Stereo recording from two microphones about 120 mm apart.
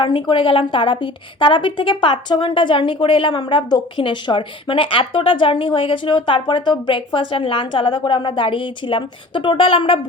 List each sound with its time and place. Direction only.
0.0 s a woman's voice: 45° left (ahead or behind)